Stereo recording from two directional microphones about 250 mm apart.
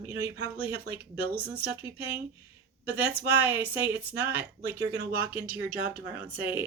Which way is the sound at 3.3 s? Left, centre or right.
Centre.